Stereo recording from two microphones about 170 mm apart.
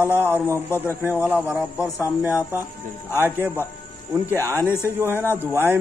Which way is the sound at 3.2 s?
15° right (ahead or behind).